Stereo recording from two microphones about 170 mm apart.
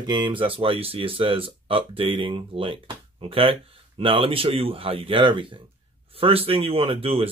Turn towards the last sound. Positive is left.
turn(degrees=-35)  # may be behind; listen again after turning